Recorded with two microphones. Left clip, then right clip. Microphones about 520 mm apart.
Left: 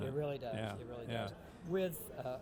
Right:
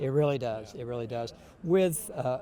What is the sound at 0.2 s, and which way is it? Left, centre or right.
A man's voice, right.